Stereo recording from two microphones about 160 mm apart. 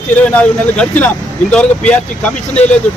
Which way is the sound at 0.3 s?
10° left (ahead or behind).